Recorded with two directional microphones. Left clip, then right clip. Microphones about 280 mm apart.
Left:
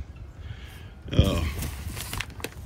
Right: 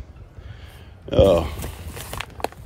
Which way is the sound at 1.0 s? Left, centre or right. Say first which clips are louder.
Right 13 dB; centre.